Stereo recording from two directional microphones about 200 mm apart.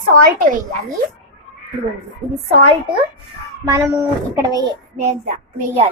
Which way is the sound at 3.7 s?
15° right (ahead or behind).